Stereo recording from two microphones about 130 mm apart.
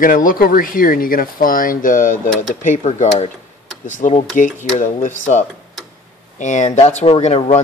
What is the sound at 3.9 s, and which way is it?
Speech, 80° left.